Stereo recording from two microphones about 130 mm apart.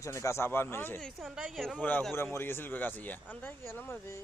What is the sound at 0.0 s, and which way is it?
Speech, 20° left (ahead or behind).